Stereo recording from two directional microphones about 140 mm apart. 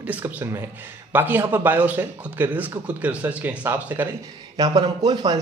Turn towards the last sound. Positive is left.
turn(degrees=-30)  # may be behind; listen again after turning